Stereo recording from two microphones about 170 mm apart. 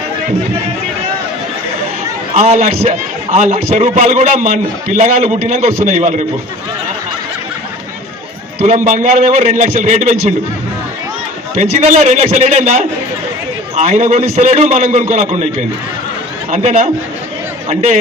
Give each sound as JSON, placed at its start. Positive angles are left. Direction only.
{"t": 2.3, "sound": "a man's voice", "side_deg": -40}
{"t": 8.6, "sound": "a man's voice", "side_deg": -45}
{"t": 11.5, "sound": "a man's voice", "side_deg": -40}
{"t": 16.5, "sound": "a man's voice", "side_deg": -40}